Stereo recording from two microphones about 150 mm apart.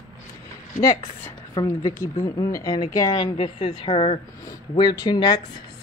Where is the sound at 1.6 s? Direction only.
25° left (ahead or behind).